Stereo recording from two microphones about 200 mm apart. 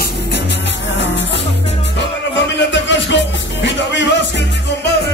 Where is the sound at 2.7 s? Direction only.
65° left (ahead or behind).